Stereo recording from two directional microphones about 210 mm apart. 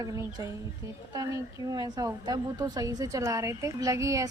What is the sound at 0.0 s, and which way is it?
A woman's voice, 15° right (ahead or behind).